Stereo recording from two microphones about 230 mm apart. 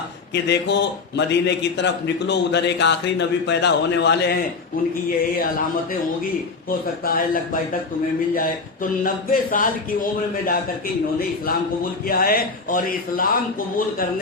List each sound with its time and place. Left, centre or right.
0.4 s a man's voice: left
12.0 s speech: left